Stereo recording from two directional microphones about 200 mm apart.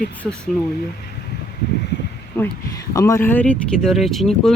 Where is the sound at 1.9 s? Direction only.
60° left (ahead or behind).